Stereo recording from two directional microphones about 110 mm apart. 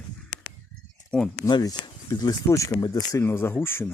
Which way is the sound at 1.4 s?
35° left (ahead or behind).